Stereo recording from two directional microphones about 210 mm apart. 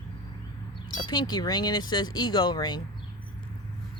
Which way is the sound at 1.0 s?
20° left (ahead or behind).